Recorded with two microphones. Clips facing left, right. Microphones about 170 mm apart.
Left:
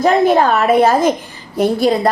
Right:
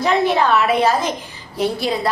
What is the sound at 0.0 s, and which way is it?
A woman's voice, 45° left (ahead or behind).